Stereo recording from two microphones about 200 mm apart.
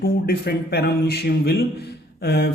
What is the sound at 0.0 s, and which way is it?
A man's voice, 50° left (ahead or behind).